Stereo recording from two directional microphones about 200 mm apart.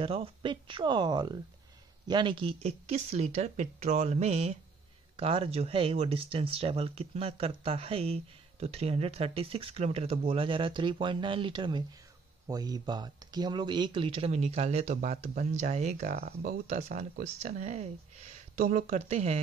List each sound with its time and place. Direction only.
0.0 s speech: 30° right (ahead or behind); by 16.5 s 45° right (ahead or behind)
16.6 s speech: 35° right (ahead or behind)